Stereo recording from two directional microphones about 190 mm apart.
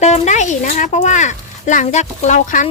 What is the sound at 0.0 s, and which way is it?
Speech, 40° left (ahead or behind).